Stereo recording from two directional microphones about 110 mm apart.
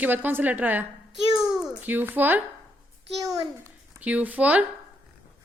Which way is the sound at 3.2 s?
30° right (ahead or behind).